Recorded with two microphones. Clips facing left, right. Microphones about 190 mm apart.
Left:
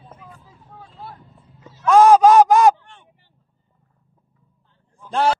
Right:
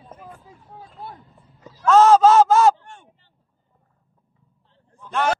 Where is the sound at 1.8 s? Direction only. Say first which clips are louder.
Left 2 dB; 15° left (ahead or behind).